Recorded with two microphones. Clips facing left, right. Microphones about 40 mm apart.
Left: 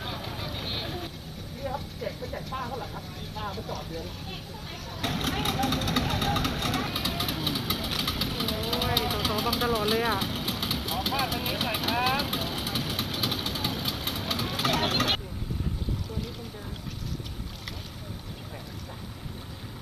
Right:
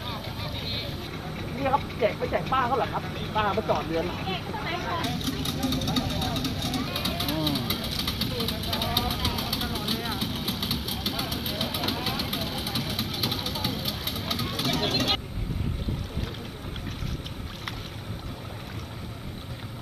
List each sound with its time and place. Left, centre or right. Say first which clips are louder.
1.6 s speech: right 10 dB; right
5.0 s vehicle: left 1 dB; left
6.9 s vehicle: right 1 dB; right
7.9 s engine: even; left
9.3 s vehicle: left 4 dB; left
10.4 s engine: even; right
10.9 s vehicle: left 3 dB; left
12.5 s vehicle: even; right
13.0 s vehicle: even; left